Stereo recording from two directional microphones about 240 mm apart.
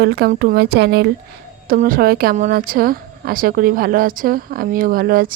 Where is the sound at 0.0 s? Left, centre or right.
Right.